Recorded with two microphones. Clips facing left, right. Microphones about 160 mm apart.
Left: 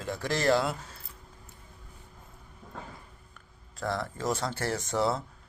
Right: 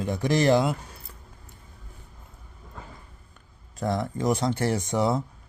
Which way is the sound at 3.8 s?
20° right (ahead or behind).